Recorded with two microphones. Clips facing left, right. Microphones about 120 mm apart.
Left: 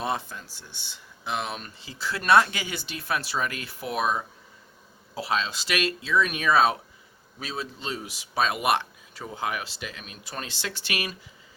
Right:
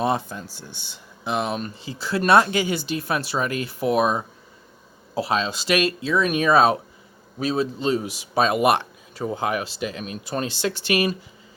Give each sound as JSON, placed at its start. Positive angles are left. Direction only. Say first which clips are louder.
{"t": 0.0, "sound": "speech", "louder": "right 6 dB", "side_deg": -30}
{"t": 0.5, "sound": "speech", "louder": "right 6 dB", "side_deg": -10}
{"t": 1.2, "sound": "speech", "louder": "right 6 dB", "side_deg": -40}
{"t": 5.1, "sound": "speech", "louder": "right 5 dB", "side_deg": -40}